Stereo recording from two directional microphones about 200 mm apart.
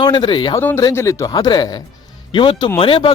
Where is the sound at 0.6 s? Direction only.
10° left (ahead or behind).